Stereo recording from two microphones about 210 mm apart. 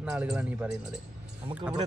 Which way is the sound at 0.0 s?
5° right (ahead or behind).